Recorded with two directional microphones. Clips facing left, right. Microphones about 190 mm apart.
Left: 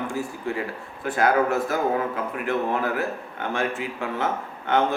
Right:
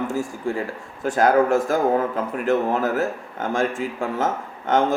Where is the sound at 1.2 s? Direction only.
45° right (ahead or behind).